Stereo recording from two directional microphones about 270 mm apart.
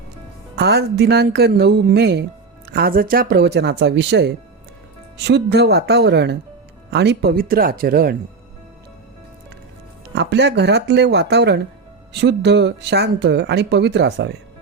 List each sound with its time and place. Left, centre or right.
0.5 s speech: right
10.2 s speech: right